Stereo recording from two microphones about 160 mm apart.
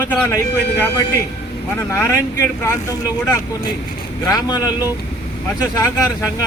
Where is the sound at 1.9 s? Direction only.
15° left (ahead or behind).